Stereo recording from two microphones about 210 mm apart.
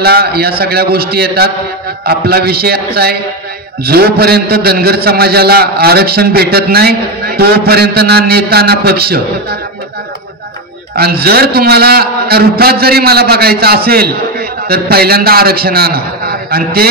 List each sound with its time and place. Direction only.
0.0 s a man's voice: 50° right (ahead or behind)
11.0 s a man's voice: 50° right (ahead or behind)